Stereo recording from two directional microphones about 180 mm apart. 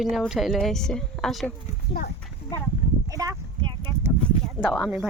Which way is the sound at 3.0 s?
20° right (ahead or behind).